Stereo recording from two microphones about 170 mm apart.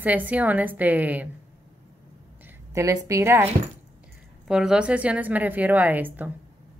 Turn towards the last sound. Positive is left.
turn(degrees=-10)  # may be behind; listen again after turning